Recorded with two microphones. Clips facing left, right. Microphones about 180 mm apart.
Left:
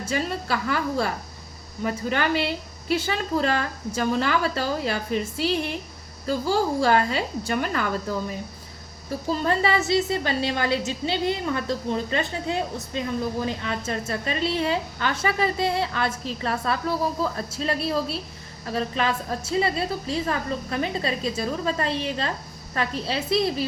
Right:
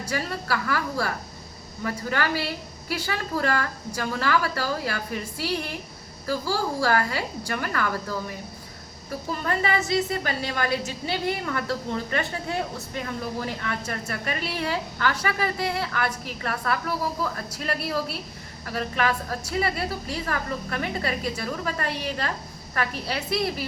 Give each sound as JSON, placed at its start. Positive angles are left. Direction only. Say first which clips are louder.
{"t": 0.0, "sound": "a woman's voice", "louder": "left 3 dB", "side_deg": 25}